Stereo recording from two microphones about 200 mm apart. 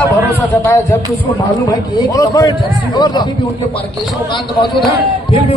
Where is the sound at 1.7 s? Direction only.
15° left (ahead or behind).